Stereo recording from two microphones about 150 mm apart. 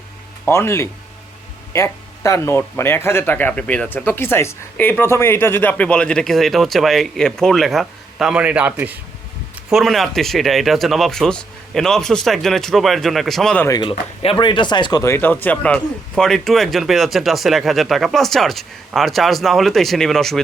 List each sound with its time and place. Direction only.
0.4 s speech: 15° left (ahead or behind); by 9.0 s 10° right (ahead or behind)
9.6 s speech: centre (ahead or behind)
13.8 s speech: 35° left (ahead or behind)
15.0 s speech: 15° left (ahead or behind)